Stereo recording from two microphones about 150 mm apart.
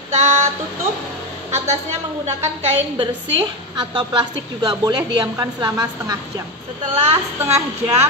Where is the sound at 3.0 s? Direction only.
35° right (ahead or behind).